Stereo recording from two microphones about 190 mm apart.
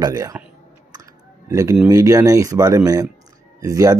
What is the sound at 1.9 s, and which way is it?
Speech, 15° right (ahead or behind).